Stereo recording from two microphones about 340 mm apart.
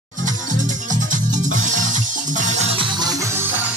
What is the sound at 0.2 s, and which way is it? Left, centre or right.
Music, right.